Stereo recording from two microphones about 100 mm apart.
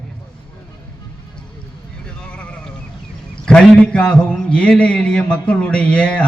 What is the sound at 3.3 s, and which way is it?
A man's voice, 10° left (ahead or behind).